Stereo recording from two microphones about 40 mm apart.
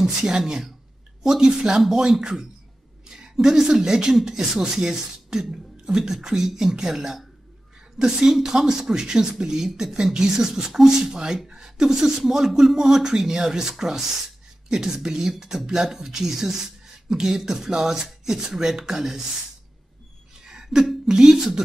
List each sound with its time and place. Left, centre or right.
0.3 s speech: centre
20.4 s throat clearing: centre
21.0 s speech: centre